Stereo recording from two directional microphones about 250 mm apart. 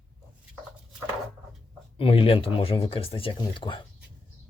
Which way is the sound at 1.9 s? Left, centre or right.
Left.